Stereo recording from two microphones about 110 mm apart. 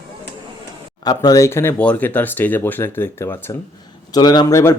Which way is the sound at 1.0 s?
35° left (ahead or behind).